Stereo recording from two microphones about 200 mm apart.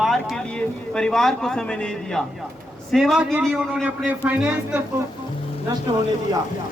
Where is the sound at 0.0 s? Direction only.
Centre (ahead or behind).